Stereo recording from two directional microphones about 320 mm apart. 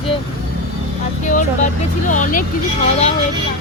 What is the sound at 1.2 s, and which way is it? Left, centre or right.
Speech, left.